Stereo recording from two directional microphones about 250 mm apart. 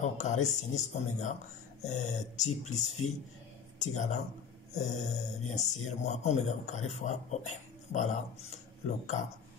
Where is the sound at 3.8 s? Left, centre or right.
Left.